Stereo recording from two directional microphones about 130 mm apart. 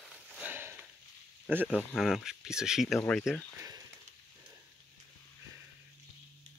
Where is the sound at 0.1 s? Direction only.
15° right (ahead or behind).